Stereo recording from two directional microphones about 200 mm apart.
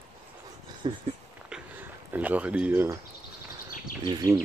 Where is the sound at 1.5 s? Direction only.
10° right (ahead or behind).